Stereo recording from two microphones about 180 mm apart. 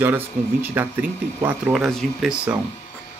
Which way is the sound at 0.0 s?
10° right (ahead or behind).